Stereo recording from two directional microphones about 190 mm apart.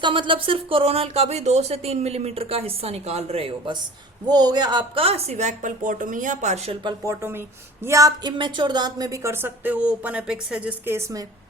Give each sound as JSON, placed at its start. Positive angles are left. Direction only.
{"t": 0.0, "sound": "speech", "side_deg": -25}
{"t": 4.3, "sound": "speech", "side_deg": -20}
{"t": 7.0, "sound": "a woman's voice", "side_deg": -15}